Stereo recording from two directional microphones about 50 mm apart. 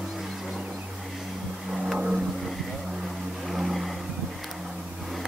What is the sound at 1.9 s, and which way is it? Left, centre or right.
Vehicle, centre.